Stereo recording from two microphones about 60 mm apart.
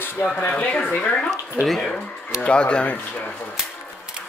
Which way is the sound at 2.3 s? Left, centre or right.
Centre.